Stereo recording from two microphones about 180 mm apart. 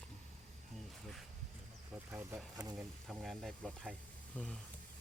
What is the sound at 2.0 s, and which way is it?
Speech, 10° right (ahead or behind).